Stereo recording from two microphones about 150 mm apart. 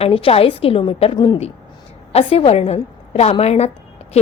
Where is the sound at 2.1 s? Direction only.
40° left (ahead or behind).